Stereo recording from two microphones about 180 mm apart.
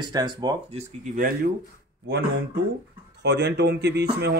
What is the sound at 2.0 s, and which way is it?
A man's voice, 65° right (ahead or behind).